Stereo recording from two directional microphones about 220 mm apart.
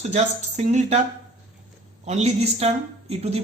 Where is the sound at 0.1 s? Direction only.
30° right (ahead or behind).